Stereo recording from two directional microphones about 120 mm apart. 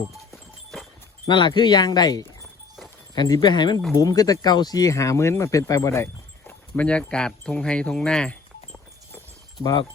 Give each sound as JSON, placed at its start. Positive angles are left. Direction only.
{"t": 1.3, "sound": "speech", "side_deg": 40}
{"t": 2.4, "sound": "clip-clop", "side_deg": 0}
{"t": 3.2, "sound": "speech", "side_deg": 35}
{"t": 6.5, "sound": "a sound", "side_deg": 10}